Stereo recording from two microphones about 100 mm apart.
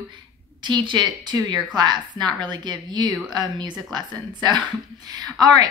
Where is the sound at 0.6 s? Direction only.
50° right (ahead or behind).